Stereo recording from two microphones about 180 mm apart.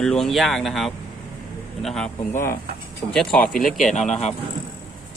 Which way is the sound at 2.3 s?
15° left (ahead or behind).